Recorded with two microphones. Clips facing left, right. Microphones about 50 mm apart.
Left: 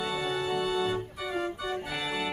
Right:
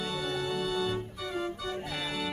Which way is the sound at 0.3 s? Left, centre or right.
Centre.